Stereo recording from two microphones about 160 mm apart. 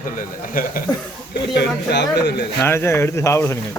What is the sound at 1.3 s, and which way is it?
Speech, 90° left.